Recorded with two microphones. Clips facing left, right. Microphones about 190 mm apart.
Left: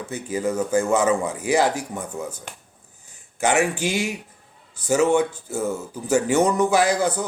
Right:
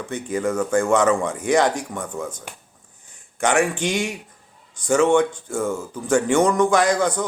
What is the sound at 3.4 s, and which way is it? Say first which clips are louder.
Speech: right 1 dB; 5° left (ahead or behind).